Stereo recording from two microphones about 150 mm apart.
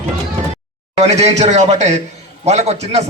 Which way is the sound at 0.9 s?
45° right (ahead or behind).